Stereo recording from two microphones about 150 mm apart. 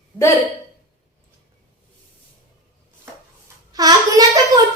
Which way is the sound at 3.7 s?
25° right (ahead or behind).